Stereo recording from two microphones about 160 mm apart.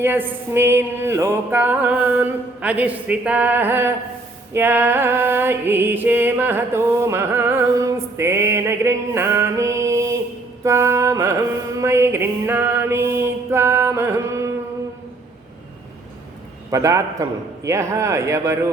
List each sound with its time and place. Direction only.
0.0 s music: 15° right (ahead or behind)
16.7 s a man's voice: 20° right (ahead or behind)